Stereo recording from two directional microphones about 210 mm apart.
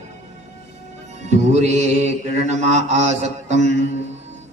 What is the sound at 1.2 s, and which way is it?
A man's voice, 35° right (ahead or behind).